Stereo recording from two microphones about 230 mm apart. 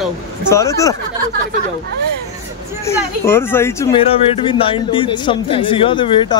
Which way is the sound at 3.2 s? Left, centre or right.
Centre.